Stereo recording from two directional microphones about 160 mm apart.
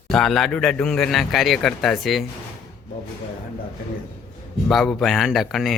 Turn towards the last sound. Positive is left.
turn(degrees=0)  # may be behind; listen again after turning